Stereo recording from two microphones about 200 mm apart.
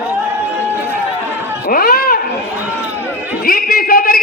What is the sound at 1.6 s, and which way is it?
Speech, 45° left (ahead or behind).